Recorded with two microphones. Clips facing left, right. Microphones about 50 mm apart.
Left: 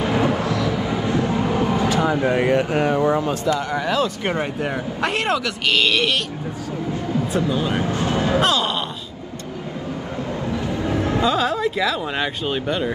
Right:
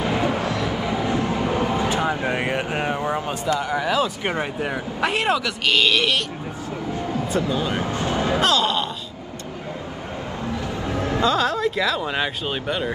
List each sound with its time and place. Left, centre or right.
0.0 s vehicle: left
0.3 s music: right
1.5 s vehicle: right
3.5 s speech: centre
7.3 s speech: centre
7.9 s vehicle: right
8.4 s speech: centre
10.9 s a sound: left
11.2 s speech: centre